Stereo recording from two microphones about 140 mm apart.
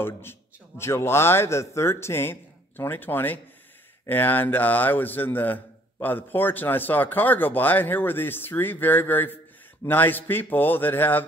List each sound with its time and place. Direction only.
0.0 s a man's voice: 15° left (ahead or behind)